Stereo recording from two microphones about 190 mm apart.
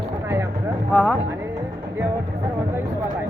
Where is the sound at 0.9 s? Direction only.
5° left (ahead or behind).